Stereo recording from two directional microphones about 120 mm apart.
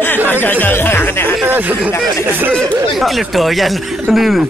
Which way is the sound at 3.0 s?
Centre (ahead or behind).